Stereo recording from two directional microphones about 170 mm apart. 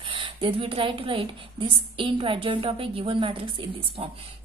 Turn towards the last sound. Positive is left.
turn(degrees=-35)  # may be behind; listen again after turning